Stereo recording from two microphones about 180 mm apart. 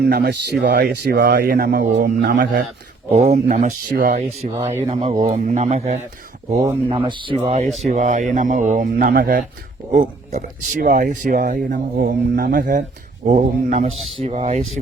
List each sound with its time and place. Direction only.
0.0 s speech: 60° right (ahead or behind)
3.1 s a man's voice: 40° right (ahead or behind)